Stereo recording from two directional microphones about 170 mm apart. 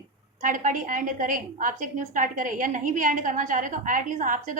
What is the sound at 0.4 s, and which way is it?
A woman's voice, 50° right (ahead or behind).